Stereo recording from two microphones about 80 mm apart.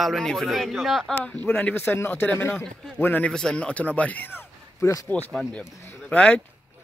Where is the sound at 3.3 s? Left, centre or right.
Centre.